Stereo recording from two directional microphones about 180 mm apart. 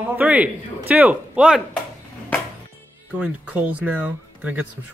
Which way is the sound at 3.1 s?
5° right (ahead or behind).